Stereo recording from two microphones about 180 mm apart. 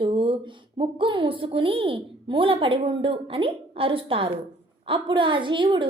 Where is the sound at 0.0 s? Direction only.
30° right (ahead or behind).